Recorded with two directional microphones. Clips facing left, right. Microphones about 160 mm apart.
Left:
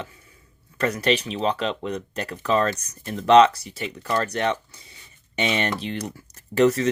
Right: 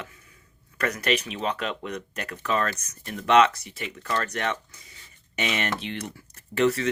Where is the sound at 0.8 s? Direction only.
30° left (ahead or behind).